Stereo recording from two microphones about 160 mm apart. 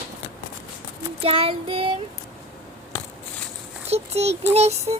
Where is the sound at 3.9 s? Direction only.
40° right (ahead or behind).